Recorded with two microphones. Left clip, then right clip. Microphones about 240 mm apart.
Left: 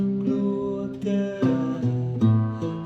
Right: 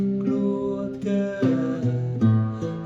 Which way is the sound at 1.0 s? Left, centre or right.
Centre.